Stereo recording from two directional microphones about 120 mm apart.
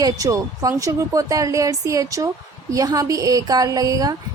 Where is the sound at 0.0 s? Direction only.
30° right (ahead or behind).